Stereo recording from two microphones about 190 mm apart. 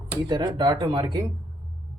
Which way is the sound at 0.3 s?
20° right (ahead or behind).